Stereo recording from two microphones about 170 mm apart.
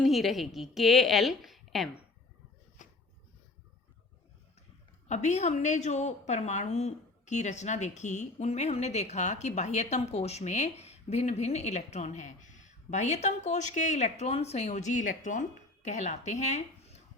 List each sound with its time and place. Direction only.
0.0 s a woman's voice: centre (ahead or behind)
2.8 s a sound: 45° left (ahead or behind)
5.0 s a woman's voice: 45° left (ahead or behind)